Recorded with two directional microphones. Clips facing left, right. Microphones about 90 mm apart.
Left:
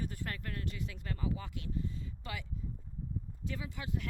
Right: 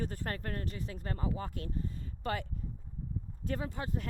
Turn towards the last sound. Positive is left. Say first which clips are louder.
# right 4 dB
turn(degrees=-40)  # may be behind; listen again after turning